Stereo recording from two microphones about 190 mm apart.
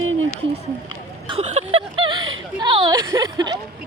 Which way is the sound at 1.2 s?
30° right (ahead or behind).